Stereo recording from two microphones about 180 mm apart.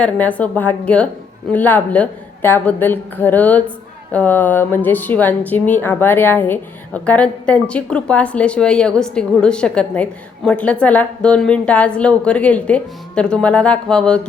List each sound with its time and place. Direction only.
0.0 s a woman's voice: 10° left (ahead or behind)